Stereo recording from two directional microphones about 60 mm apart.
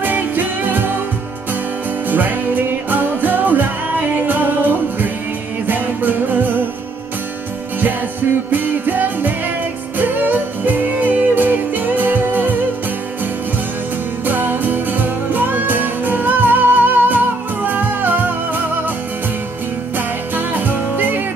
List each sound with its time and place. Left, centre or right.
0.0 s music: right
2.0 s music: right
8.5 s music: right
14.2 s music: right
20.0 s music: right